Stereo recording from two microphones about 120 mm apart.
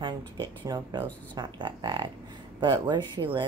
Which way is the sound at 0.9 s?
35° right (ahead or behind).